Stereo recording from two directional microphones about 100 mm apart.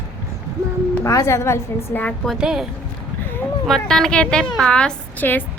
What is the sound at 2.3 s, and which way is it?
Speech, 5° right (ahead or behind).